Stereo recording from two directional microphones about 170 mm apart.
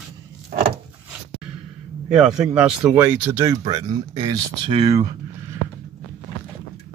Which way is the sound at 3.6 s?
30° right (ahead or behind).